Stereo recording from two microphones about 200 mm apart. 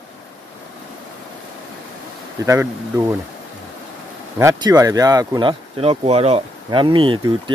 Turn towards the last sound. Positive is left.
turn(degrees=-25)  # may be behind; listen again after turning